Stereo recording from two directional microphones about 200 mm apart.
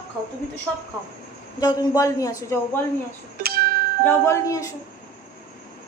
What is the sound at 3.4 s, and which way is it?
Music, 50° right (ahead or behind).